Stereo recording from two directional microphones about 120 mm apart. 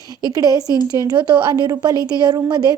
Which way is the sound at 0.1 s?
35° right (ahead or behind).